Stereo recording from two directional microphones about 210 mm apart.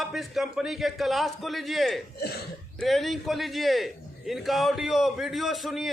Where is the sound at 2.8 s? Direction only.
Centre (ahead or behind).